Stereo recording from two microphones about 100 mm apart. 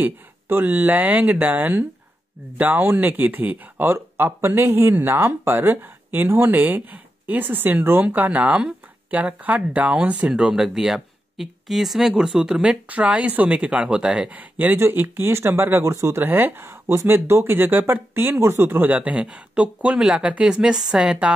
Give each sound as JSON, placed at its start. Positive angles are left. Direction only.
{"t": 0.0, "sound": "speech", "side_deg": -20}